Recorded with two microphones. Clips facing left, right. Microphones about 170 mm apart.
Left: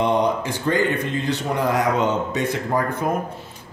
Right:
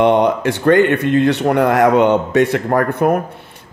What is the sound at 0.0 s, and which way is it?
A man's voice, 65° right (ahead or behind).